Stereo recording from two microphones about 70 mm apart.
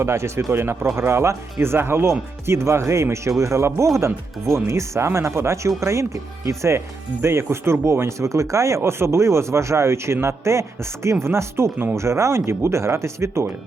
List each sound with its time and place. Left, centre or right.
0.0 s speech: right